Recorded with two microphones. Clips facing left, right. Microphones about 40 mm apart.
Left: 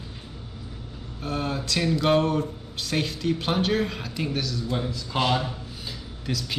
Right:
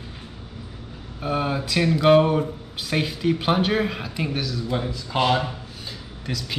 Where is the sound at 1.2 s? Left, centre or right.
Centre.